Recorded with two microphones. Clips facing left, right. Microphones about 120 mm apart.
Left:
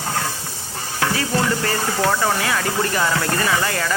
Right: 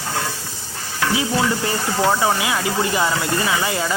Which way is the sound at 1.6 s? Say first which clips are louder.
Right 1 dB; 15° right (ahead or behind).